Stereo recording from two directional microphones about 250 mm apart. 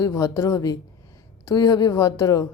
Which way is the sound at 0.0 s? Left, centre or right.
Centre.